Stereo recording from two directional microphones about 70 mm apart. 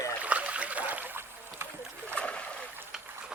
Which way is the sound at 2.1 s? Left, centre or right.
Centre.